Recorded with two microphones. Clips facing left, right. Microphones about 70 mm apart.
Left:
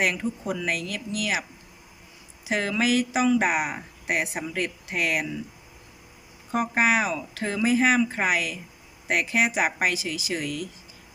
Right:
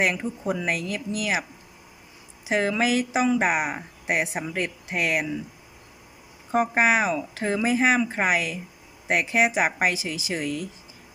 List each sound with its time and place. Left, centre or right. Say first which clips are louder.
0.0 s speech: right 1 dB; centre
2.5 s speech: right 1 dB; centre
6.5 s speech: right 2 dB; right